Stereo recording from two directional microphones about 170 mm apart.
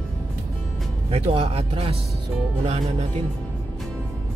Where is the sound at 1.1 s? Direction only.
35° right (ahead or behind).